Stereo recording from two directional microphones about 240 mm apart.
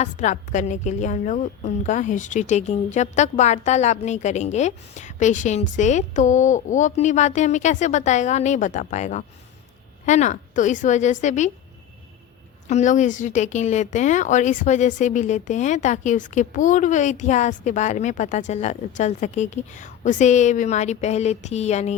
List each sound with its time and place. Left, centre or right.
0.0 s a woman's voice: left
12.6 s a woman's voice: left